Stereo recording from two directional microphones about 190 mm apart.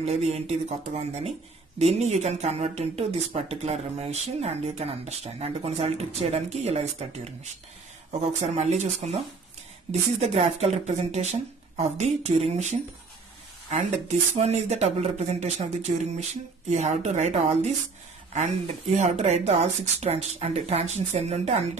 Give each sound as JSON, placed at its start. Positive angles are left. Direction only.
{"t": 0.0, "sound": "speech", "side_deg": -35}